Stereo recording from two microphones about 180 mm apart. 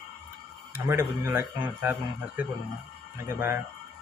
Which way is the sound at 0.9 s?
15° right (ahead or behind).